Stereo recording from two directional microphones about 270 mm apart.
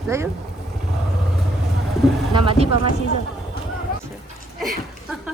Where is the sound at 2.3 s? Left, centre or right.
Centre.